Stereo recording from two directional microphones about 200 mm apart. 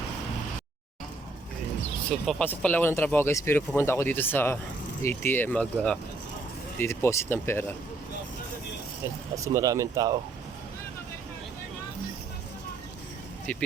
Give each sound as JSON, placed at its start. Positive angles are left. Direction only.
{"t": 2.0, "sound": "speech", "side_deg": 5}
{"t": 9.3, "sound": "speech", "side_deg": -15}
{"t": 13.5, "sound": "speech", "side_deg": 5}